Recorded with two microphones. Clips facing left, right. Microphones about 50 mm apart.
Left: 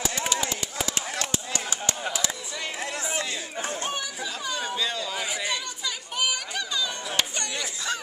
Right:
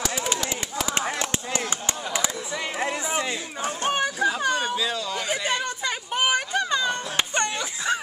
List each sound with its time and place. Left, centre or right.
1.1 s chop: right
2.8 s chatter: right
3.8 s chatter: right
4.7 s a sound: centre
5.4 s chatter: right